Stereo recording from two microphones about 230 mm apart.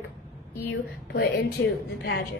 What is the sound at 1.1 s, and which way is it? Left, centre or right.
A woman's voice, left.